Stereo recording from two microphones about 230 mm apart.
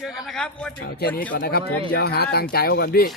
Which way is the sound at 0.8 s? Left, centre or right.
Left.